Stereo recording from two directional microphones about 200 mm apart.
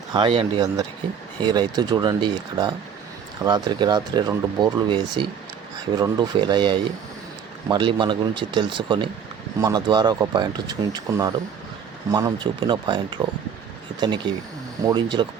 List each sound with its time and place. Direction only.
0.1 s speech: 25° right (ahead or behind)
14.8 s speech: 20° right (ahead or behind)